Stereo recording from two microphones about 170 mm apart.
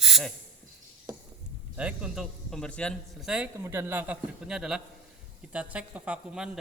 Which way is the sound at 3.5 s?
15° right (ahead or behind).